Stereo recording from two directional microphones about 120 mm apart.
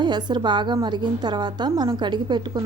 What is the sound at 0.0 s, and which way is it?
A woman's voice, 40° right (ahead or behind).